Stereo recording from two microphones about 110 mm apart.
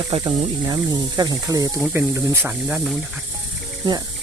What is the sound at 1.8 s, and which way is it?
Speech, 20° right (ahead or behind).